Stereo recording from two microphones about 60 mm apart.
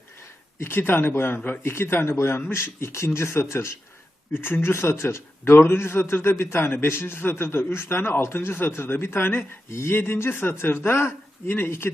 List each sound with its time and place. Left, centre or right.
0.6 s a man's voice: left
4.4 s a man's voice: left